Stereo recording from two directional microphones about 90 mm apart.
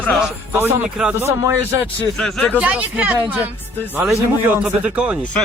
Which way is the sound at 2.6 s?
15° right (ahead or behind).